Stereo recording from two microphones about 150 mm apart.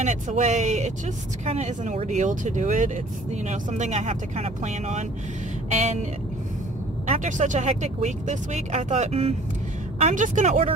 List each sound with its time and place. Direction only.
0.0 s speech: 55° right (ahead or behind)
7.1 s speech: 55° right (ahead or behind)
10.0 s a woman's voice: 60° right (ahead or behind)